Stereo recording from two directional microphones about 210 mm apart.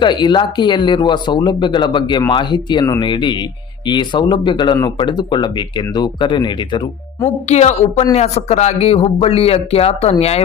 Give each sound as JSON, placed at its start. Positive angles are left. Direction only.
{"t": 0.0, "sound": "speech", "side_deg": 20}
{"t": 7.4, "sound": "a woman's voice", "side_deg": 35}